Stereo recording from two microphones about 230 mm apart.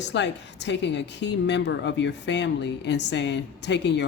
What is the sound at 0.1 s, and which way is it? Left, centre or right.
A woman's voice, left.